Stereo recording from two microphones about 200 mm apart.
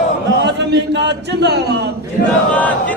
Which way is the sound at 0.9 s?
60° right (ahead or behind).